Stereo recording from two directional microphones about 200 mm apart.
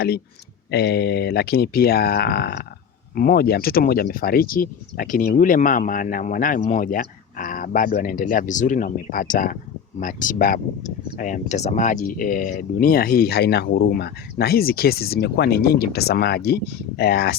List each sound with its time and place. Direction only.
0.7 s speech: 55° left (ahead or behind)